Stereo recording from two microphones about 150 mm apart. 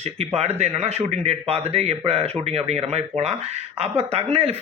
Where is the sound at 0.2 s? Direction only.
45° right (ahead or behind).